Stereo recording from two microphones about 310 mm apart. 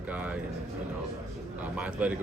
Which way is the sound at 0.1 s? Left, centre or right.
Centre.